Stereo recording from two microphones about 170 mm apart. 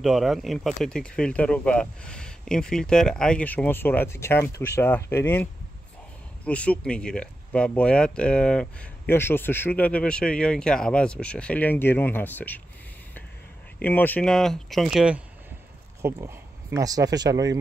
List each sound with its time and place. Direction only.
0.0 s speech: centre (ahead or behind)
13.8 s speech: 10° left (ahead or behind)
16.0 s speech: 15° right (ahead or behind)